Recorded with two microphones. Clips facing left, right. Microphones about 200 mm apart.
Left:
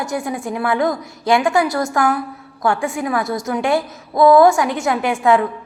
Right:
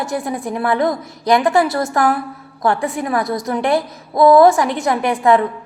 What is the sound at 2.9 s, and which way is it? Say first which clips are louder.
Speech: right 1 dB; centre (ahead or behind).